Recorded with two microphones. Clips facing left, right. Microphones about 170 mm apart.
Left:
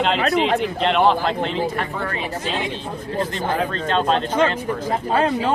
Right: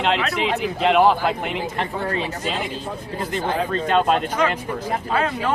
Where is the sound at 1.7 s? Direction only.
25° right (ahead or behind).